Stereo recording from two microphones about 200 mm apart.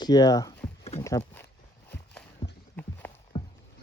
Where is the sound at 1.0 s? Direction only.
15° left (ahead or behind).